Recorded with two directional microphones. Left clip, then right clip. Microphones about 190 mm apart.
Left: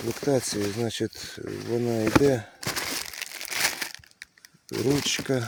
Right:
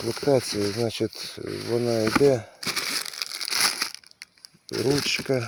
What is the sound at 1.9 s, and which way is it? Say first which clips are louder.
Speech: right 1 dB; 10° left (ahead or behind).